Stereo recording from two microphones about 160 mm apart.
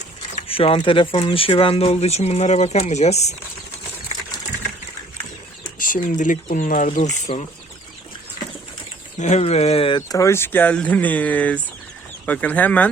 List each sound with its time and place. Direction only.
0.4 s speech: 35° left (ahead or behind)
5.8 s speech: 60° left (ahead or behind)
7.3 s speech: 35° left (ahead or behind)
9.1 s speech: 45° left (ahead or behind)
10.1 s speech: 20° left (ahead or behind)